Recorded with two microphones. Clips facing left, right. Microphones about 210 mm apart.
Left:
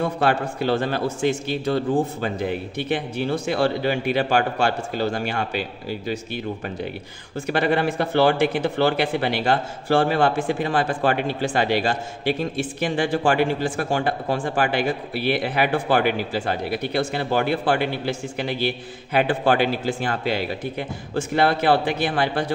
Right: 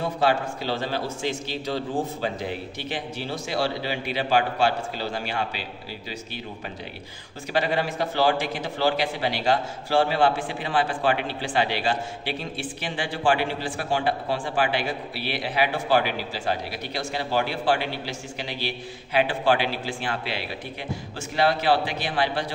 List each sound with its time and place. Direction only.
0.0 s a man's voice: 55° left (ahead or behind)